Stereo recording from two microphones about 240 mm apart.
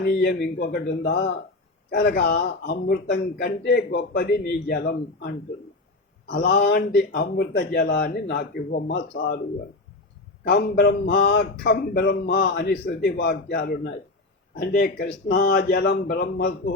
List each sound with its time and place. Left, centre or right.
0.0 s a man's voice: left
6.3 s a man's voice: left
10.5 s a man's voice: left